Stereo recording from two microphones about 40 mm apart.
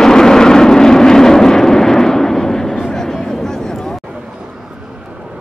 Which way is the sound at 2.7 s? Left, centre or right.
Centre.